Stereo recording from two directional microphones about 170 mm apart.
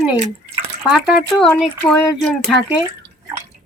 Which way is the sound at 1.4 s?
5° left (ahead or behind).